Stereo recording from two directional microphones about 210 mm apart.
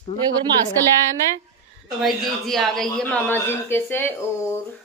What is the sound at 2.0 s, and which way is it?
A woman's voice, centre (ahead or behind).